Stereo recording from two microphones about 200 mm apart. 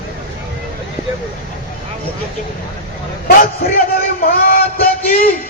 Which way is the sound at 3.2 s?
50° left (ahead or behind).